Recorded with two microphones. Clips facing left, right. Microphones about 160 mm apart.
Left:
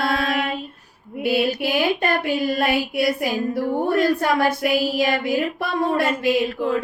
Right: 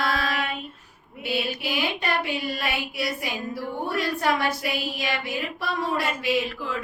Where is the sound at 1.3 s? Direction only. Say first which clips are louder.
Left 8 dB; 50° left (ahead or behind).